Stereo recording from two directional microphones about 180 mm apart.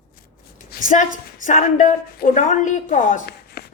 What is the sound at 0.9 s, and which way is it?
A woman's voice, 45° left (ahead or behind).